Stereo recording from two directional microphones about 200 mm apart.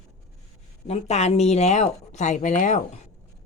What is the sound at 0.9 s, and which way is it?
Speech, 35° left (ahead or behind).